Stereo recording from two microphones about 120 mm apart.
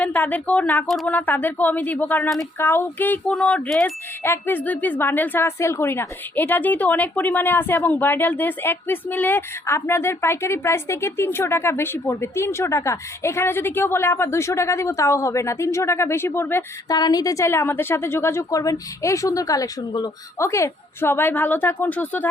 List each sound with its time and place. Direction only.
0.0 s a woman's voice: 15° left (ahead or behind)
4.2 s a woman's voice: 20° left (ahead or behind)
16.9 s a woman's voice: 35° left (ahead or behind); by 22.3 s 15° left (ahead or behind)